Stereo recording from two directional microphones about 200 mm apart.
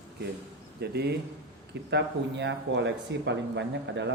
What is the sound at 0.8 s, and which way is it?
Speech, 55° right (ahead or behind).